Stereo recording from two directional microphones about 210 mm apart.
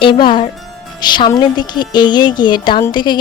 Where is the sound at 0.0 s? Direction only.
20° left (ahead or behind).